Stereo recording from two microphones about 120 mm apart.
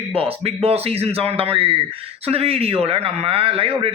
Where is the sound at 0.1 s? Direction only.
50° right (ahead or behind).